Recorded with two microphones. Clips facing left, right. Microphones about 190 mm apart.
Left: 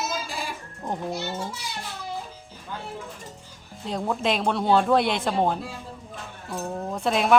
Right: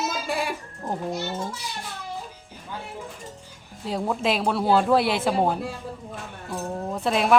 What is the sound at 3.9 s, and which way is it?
Speech, 5° right (ahead or behind).